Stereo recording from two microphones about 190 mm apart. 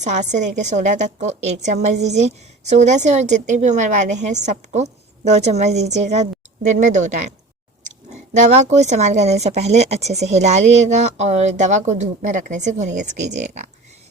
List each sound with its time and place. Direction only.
0.0 s a woman's voice: 40° right (ahead or behind)